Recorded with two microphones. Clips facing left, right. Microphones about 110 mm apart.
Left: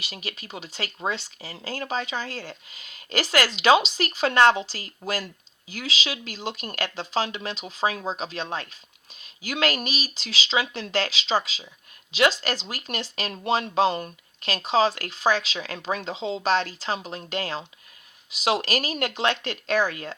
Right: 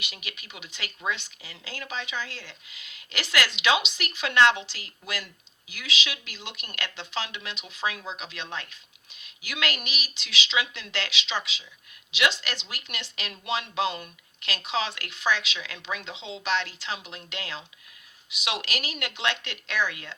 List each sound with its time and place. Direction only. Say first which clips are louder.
0.0 s speech: left 5 dB; 35° left (ahead or behind)